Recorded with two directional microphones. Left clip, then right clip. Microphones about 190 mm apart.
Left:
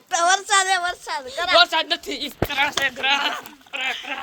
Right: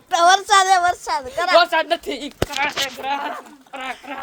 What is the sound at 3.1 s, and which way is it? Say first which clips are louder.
Speech: left 3 dB; 35° right (ahead or behind).